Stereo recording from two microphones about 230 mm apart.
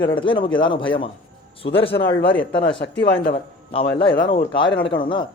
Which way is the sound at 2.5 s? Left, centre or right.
Left.